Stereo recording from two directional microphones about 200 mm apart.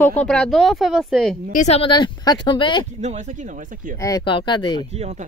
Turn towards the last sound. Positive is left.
turn(degrees=-30)  # may be behind; listen again after turning